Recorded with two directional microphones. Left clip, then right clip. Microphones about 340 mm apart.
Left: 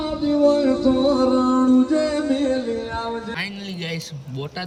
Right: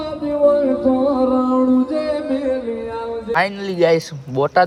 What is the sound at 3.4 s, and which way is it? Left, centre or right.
Speech, centre.